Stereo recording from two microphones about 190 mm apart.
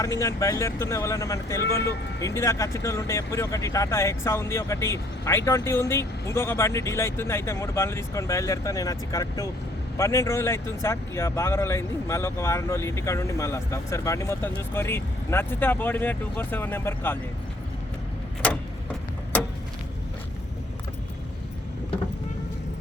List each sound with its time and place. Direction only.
0.0 s speech: 15° left (ahead or behind)